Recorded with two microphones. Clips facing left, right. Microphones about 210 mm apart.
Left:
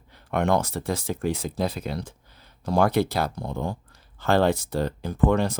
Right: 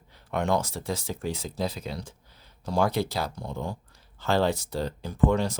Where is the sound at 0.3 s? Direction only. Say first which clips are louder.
Left 3 dB; 55° left (ahead or behind).